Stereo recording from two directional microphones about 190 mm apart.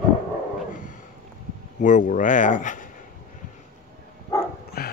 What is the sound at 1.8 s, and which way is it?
Speech, 40° left (ahead or behind).